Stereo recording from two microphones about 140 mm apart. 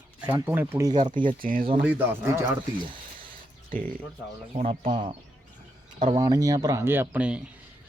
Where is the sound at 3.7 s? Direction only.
80° right.